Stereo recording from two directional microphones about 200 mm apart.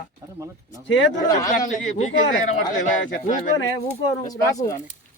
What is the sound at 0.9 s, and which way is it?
Speech, 65° left (ahead or behind).